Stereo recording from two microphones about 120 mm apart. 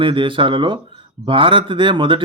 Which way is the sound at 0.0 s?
45° right (ahead or behind).